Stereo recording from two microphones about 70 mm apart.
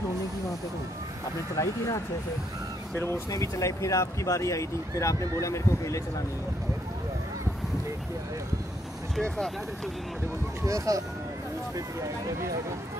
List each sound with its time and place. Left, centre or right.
1.6 s speech: left
3.3 s speech: left
10.6 s speech: right